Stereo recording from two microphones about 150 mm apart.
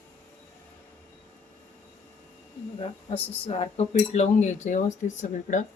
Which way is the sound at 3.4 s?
45° left (ahead or behind).